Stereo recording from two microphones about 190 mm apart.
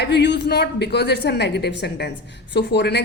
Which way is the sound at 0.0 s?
65° left (ahead or behind).